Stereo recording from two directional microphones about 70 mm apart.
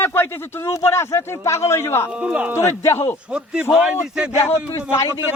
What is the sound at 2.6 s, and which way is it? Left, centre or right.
Speech, left.